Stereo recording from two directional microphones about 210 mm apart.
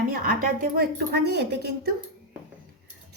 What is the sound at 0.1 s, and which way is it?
A woman's voice, 40° right (ahead or behind).